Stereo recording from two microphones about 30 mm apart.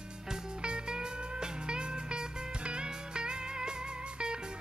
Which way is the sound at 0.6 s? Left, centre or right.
Right.